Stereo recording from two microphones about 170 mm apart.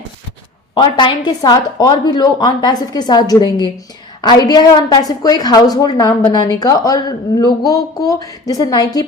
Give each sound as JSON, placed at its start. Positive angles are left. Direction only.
{"t": 0.7, "sound": "a woman's voice", "side_deg": 30}